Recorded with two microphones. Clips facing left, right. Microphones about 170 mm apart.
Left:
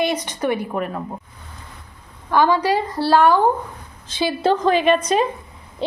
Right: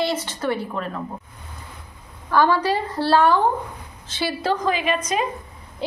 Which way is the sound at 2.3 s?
15° left (ahead or behind).